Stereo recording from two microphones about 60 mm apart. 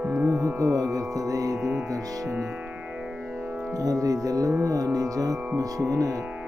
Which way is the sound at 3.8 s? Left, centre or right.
Right.